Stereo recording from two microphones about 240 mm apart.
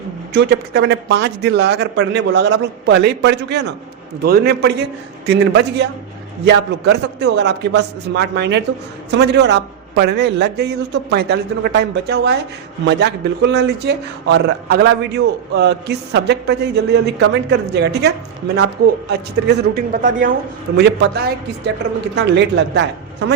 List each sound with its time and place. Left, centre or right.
0.3 s a man's voice: right